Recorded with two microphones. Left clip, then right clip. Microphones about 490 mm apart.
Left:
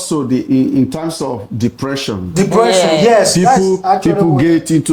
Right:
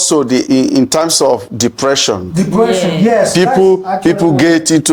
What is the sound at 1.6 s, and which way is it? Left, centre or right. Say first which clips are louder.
Rapping: right 7 dB; right.